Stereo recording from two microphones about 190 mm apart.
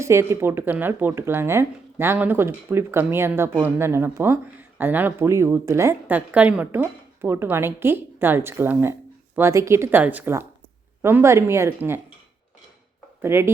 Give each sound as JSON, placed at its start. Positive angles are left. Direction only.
{"t": 0.0, "sound": "a woman's voice", "side_deg": -15}
{"t": 13.2, "sound": "a woman's voice", "side_deg": -10}